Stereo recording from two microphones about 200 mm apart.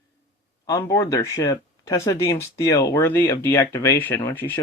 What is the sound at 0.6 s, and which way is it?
Speech, 15° left (ahead or behind).